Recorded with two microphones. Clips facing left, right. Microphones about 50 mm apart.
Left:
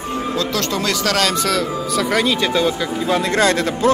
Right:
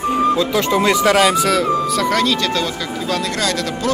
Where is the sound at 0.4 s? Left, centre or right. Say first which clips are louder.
Right 4 dB; centre.